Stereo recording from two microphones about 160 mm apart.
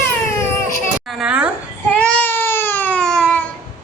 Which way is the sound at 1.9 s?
10° left (ahead or behind).